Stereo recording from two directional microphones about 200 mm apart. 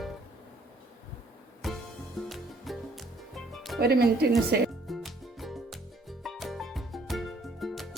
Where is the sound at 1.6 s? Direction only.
Centre (ahead or behind).